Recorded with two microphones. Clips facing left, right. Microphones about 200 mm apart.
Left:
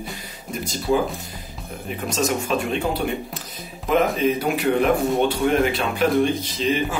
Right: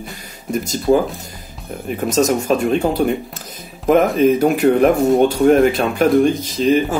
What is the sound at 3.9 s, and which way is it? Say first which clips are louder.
Speech: right 7 dB; 45° right (ahead or behind).